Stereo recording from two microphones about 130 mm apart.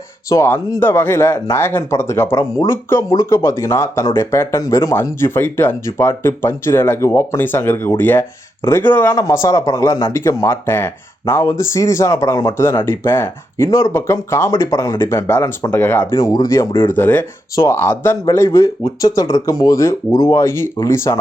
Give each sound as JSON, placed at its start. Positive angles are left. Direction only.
{"t": 0.3, "sound": "speech", "side_deg": 20}
{"t": 16.1, "sound": "speech", "side_deg": 25}